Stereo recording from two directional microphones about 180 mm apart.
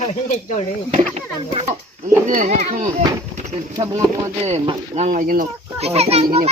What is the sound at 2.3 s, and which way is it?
Speech, 40° right (ahead or behind).